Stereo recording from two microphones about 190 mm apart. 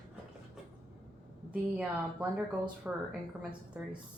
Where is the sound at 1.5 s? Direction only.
5° right (ahead or behind).